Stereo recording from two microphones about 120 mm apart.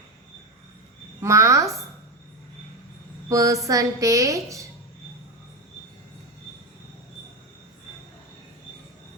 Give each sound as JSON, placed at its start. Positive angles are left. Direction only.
{"t": 1.2, "sound": "a woman's voice", "side_deg": -25}
{"t": 3.2, "sound": "a woman's voice", "side_deg": -30}